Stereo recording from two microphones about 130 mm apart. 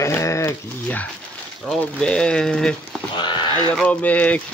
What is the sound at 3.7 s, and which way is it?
Speech, 10° left (ahead or behind).